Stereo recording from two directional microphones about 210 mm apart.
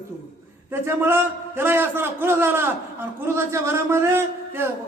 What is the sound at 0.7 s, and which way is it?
A man's voice, 10° right (ahead or behind).